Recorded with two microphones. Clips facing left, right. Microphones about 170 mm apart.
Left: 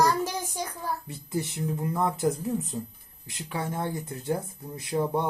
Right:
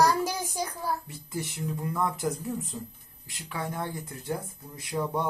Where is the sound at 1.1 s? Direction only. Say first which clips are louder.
Left 4 dB; 25° left (ahead or behind).